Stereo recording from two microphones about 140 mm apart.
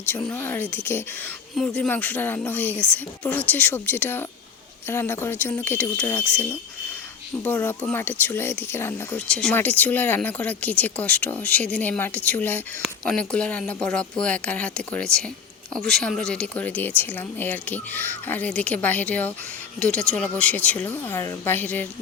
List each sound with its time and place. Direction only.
0.3 s speech: 15° left (ahead or behind)
9.3 s speech: 5° left (ahead or behind)